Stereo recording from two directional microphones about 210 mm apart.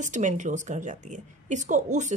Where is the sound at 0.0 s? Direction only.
35° right (ahead or behind).